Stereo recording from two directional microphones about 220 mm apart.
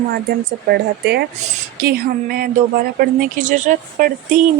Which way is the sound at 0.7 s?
50° right (ahead or behind).